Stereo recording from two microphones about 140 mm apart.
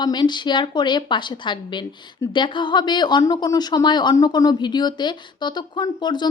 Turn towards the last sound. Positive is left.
turn(degrees=30)  # may be behind; listen again after turning